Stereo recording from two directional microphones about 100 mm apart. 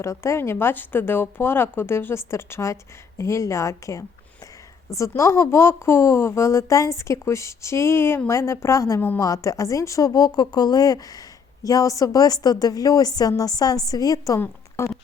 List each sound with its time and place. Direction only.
0.0 s speech: 30° left (ahead or behind)